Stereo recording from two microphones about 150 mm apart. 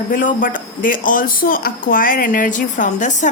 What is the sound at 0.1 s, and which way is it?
A woman's voice, 60° left (ahead or behind).